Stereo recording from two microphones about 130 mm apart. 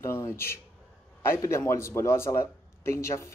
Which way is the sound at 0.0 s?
20° left (ahead or behind).